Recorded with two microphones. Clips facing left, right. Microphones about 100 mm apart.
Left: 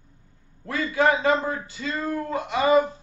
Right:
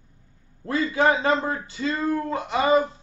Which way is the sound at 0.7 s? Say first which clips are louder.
Right 1 dB; 30° right (ahead or behind).